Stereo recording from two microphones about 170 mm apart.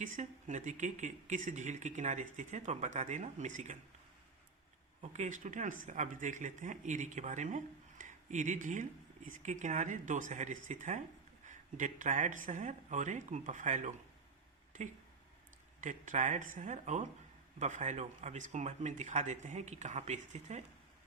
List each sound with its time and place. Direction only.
0.0 s speech: 45° right (ahead or behind)
5.1 s speech: 45° right (ahead or behind)
15.8 s speech: 45° right (ahead or behind)